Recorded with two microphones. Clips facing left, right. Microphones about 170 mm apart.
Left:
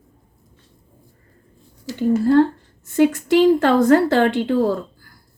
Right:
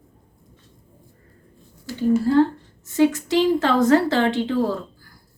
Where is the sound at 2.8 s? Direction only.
50° left (ahead or behind).